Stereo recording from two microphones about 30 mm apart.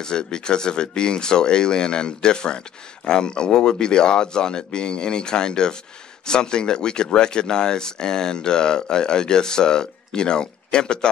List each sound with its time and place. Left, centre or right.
0.0 s speech: left